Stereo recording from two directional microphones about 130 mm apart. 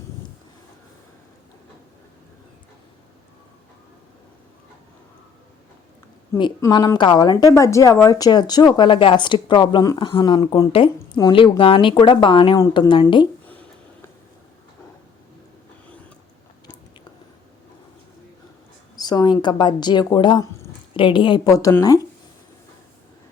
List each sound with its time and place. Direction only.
6.6 s a woman's voice: 30° left (ahead or behind)
18.9 s a woman's voice: 30° left (ahead or behind)